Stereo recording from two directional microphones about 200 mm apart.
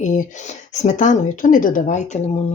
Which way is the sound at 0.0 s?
40° left (ahead or behind).